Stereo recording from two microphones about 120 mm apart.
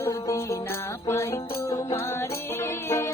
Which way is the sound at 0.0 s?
25° left (ahead or behind).